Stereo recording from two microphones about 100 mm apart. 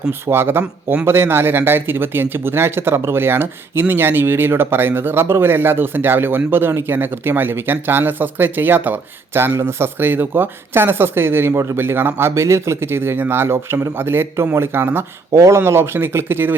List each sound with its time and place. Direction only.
0.1 s speech: 25° right (ahead or behind)
0.6 s a man's voice: 10° right (ahead or behind)
1.0 s speech: 25° right (ahead or behind)